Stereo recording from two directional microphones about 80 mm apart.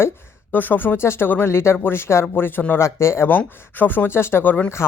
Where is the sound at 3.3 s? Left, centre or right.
Left.